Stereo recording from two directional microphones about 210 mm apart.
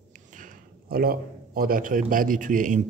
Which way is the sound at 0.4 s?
45° right (ahead or behind).